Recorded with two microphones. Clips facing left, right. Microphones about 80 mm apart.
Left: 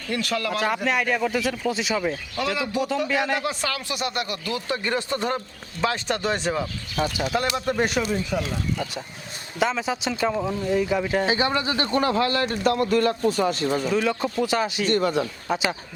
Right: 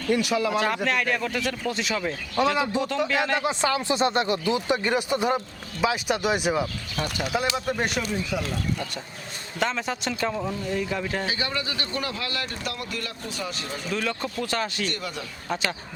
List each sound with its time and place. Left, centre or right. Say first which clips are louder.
0.1 s speech: right 3 dB; centre
0.5 s speech: left 1 dB; centre
2.8 s speech: left 1 dB; right; by 8.4 s centre
8.4 s speech: left 1 dB; centre
11.3 s speech: left 7 dB; left
13.9 s speech: left 5 dB; centre
14.8 s speech: left 11 dB; left
15.4 s speech: right 1 dB; centre